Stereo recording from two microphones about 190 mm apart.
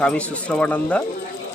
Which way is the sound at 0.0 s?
5° left (ahead or behind).